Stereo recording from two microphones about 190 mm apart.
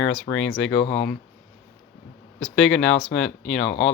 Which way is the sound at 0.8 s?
35° left (ahead or behind).